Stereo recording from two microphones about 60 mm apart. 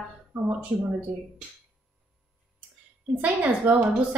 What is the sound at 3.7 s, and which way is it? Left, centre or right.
Speech, right.